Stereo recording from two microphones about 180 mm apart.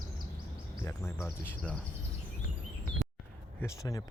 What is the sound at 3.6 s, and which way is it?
Speech, 20° left (ahead or behind).